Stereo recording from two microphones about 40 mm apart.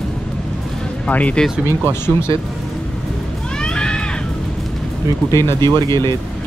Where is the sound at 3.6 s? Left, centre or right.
Left.